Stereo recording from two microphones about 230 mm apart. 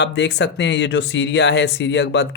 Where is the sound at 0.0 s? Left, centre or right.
Left.